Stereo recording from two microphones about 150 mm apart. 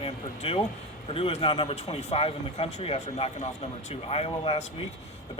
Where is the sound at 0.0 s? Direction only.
40° left (ahead or behind).